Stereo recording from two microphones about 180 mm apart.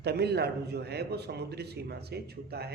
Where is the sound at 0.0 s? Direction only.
65° right (ahead or behind).